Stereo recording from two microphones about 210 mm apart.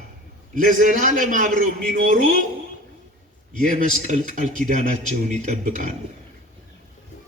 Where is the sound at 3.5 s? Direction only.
40° right (ahead or behind).